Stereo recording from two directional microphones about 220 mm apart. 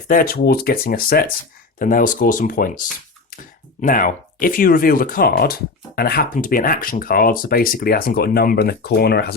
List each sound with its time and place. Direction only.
0.1 s speech: 40° left (ahead or behind)